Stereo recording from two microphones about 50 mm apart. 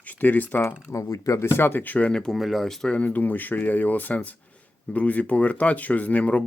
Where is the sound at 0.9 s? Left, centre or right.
Left.